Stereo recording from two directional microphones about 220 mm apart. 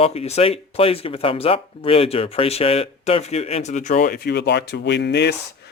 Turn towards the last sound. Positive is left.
turn(degrees=50)  # may be behind; listen again after turning